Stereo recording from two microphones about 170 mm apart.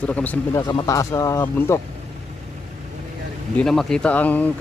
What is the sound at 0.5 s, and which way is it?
Speech, 20° left (ahead or behind).